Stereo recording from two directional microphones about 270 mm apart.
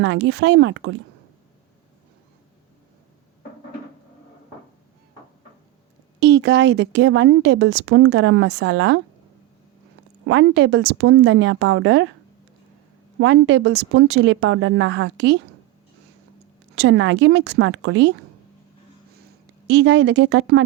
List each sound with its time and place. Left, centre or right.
0.0 s speech: right
6.1 s speech: right
10.2 s speech: right
13.1 s speech: right
16.7 s speech: right
19.6 s speech: right